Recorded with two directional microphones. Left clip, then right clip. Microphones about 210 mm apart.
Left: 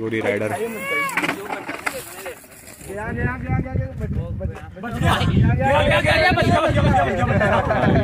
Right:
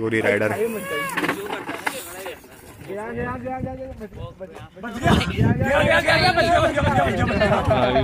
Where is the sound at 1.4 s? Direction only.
30° left (ahead or behind).